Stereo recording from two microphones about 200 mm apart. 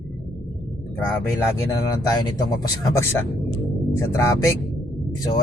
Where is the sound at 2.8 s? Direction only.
15° left (ahead or behind).